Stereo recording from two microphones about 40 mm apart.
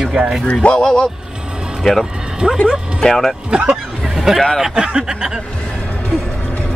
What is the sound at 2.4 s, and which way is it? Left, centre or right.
Speech, right.